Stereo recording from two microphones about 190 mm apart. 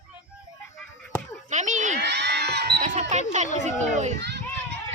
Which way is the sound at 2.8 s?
40° right (ahead or behind).